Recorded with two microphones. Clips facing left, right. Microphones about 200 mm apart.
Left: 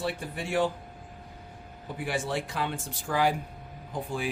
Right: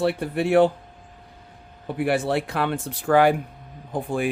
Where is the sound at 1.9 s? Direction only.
65° right (ahead or behind).